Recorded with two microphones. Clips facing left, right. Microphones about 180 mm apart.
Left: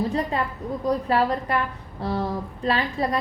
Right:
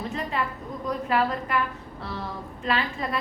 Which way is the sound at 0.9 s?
35° left (ahead or behind).